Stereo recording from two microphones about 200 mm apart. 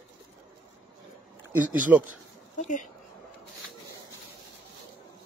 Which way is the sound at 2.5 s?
40° left (ahead or behind).